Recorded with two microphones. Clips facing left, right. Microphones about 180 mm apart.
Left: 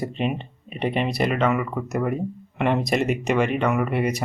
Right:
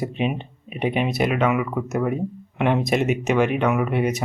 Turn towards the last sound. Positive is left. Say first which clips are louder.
# right 1 dB
turn(degrees=0)  # may be behind; listen again after turning